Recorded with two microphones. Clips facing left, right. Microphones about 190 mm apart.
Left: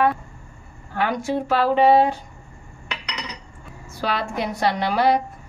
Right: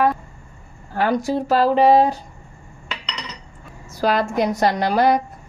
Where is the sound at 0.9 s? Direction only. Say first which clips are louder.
Right 3 dB; 40° right (ahead or behind).